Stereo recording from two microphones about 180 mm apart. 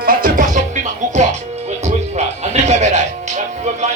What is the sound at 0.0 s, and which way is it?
Music, 50° right (ahead or behind).